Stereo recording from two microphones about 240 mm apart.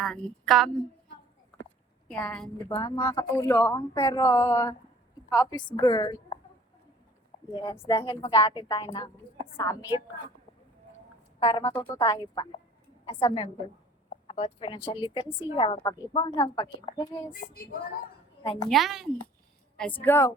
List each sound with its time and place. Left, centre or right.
0.0 s a woman's voice: centre
2.0 s a woman's voice: centre
7.5 s speech: centre
11.3 s a woman's voice: centre
17.4 s speech: left
18.7 s a woman's voice: centre